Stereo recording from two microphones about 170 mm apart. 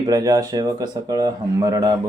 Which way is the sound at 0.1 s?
20° right (ahead or behind).